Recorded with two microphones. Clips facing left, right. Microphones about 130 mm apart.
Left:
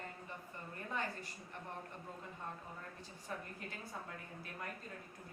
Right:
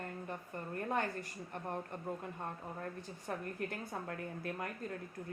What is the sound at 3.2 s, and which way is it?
A woman's voice, 60° right (ahead or behind).